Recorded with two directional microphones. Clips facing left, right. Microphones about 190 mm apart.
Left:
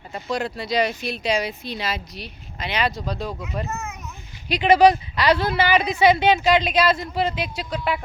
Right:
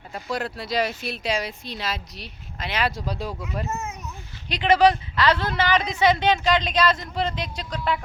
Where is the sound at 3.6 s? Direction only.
20° right (ahead or behind).